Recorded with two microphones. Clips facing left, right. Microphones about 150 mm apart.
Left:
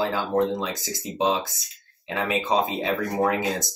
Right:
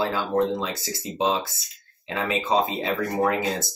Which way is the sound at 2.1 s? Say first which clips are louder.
Even; 15° left (ahead or behind).